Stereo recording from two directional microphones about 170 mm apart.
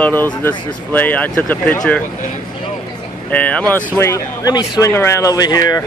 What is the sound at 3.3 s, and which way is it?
Speech, 10° left (ahead or behind).